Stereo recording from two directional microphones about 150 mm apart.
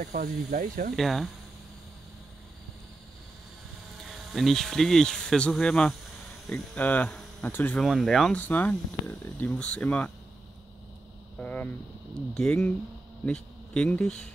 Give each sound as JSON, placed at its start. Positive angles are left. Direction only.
{"t": 0.0, "sound": "speech", "side_deg": -55}
{"t": 0.9, "sound": "speech", "side_deg": 0}
{"t": 4.0, "sound": "speech", "side_deg": 0}
{"t": 11.3, "sound": "a sound", "side_deg": 10}
{"t": 12.4, "sound": "speech", "side_deg": 5}